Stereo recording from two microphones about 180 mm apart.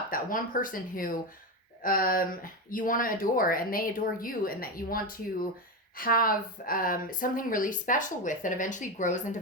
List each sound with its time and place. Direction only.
0.1 s speech: 50° left (ahead or behind)